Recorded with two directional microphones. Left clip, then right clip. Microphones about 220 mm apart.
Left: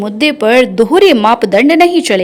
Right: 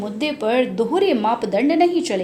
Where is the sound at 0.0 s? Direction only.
35° left (ahead or behind).